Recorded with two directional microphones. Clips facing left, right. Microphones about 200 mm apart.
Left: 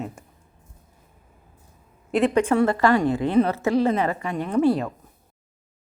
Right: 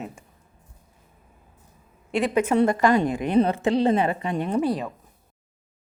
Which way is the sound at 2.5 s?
20° right (ahead or behind).